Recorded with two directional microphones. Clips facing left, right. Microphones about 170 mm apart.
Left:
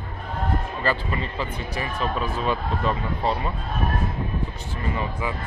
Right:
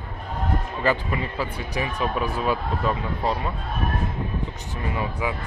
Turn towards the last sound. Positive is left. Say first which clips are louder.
# right 1 dB
turn(degrees=-10)  # may be behind; listen again after turning